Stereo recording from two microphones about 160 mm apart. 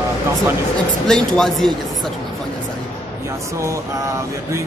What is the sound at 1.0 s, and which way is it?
Speech, 5° left (ahead or behind).